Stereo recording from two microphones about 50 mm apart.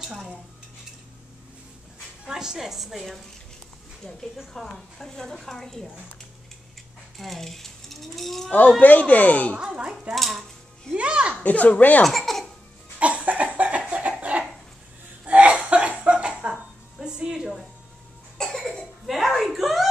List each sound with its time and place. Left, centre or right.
2.2 s a woman's voice: centre
4.7 s a woman's voice: centre
7.2 s mechanisms: centre
8.5 s speech: left
10.1 s speech: centre
11.0 s speech: right
11.4 s speech: left
12.0 s baby laughter: centre
13.0 s a sound: right
14.1 s chicken: right
15.2 s a sound: right; by 17.6 s centre
18.4 s cough: centre
19.0 s a sound: centre